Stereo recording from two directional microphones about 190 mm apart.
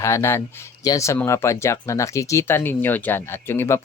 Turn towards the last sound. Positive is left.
turn(degrees=15)  # may be behind; listen again after turning